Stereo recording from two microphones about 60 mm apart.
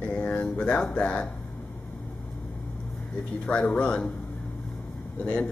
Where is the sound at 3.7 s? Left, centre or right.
Centre.